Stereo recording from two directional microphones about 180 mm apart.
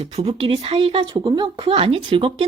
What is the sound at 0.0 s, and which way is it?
Speech, 35° right (ahead or behind).